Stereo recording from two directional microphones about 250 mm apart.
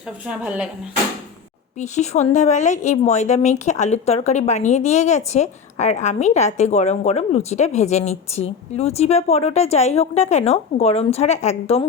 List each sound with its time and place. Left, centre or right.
0.3 s a woman's voice: centre
1.8 s speech: left